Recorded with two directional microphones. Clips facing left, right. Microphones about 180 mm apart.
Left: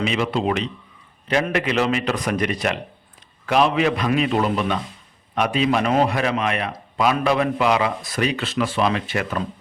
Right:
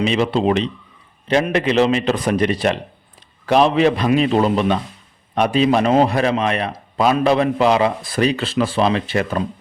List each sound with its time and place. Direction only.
0.0 s a man's voice: 30° right (ahead or behind)